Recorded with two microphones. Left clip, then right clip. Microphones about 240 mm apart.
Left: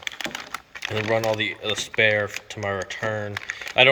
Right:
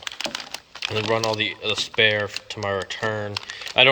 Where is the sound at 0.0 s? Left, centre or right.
Right.